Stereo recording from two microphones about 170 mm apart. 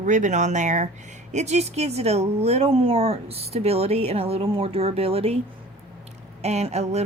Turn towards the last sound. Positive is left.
turn(degrees=-40)  # may be behind; listen again after turning